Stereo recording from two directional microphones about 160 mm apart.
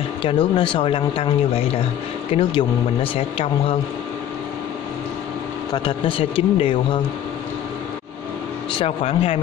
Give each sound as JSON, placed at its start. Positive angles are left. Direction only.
{"t": 0.2, "sound": "speech", "side_deg": 35}
{"t": 5.7, "sound": "speech", "side_deg": 30}
{"t": 8.7, "sound": "speech", "side_deg": 40}